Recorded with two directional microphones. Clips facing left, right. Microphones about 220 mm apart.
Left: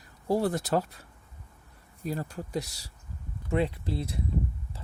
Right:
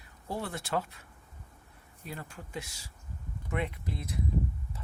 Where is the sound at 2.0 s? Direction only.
40° left (ahead or behind).